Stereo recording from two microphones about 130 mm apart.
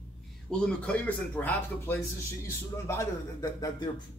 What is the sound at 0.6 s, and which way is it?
Speech, 10° left (ahead or behind).